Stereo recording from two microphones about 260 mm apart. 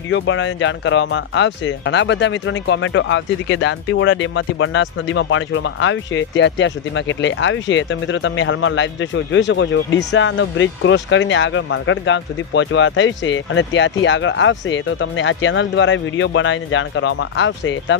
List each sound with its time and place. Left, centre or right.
0.1 s speech: left